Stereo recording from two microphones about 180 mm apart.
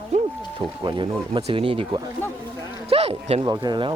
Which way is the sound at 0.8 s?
30° right (ahead or behind).